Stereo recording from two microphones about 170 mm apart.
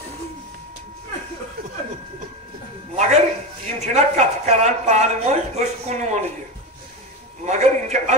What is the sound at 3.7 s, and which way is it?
Speech, 45° right (ahead or behind).